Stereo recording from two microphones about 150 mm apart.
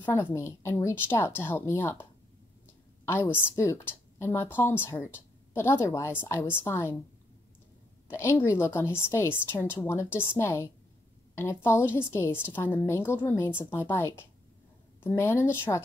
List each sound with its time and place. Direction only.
0.0 s a woman's voice: 10° left (ahead or behind)
3.5 s a woman's voice: 20° left (ahead or behind)
8.1 s a woman's voice: 20° left (ahead or behind)